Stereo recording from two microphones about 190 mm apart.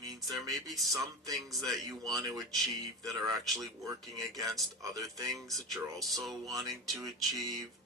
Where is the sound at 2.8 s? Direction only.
20° right (ahead or behind).